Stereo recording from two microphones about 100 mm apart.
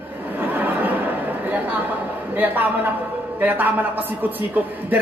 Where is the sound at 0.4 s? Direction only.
20° right (ahead or behind).